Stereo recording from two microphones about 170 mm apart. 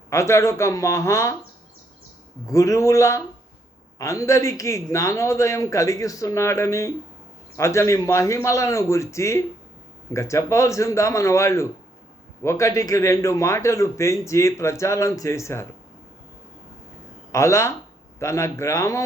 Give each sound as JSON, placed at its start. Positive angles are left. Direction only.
{"t": 0.1, "sound": "a man's voice", "side_deg": 15}
{"t": 2.5, "sound": "a man's voice", "side_deg": 20}
{"t": 17.3, "sound": "a man's voice", "side_deg": 15}